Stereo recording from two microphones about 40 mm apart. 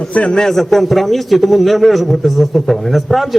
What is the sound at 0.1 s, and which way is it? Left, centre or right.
Speech, left.